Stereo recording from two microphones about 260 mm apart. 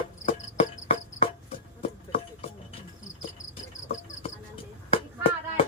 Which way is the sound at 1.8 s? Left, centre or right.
Left.